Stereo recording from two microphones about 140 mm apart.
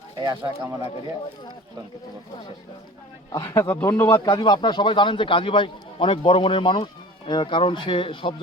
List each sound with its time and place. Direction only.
0.2 s speech: 20° right (ahead or behind)
3.3 s speech: 20° left (ahead or behind)
4.1 s a man's voice: 30° left (ahead or behind)